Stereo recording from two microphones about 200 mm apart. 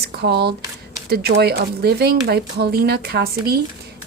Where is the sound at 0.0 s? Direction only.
55° right (ahead or behind).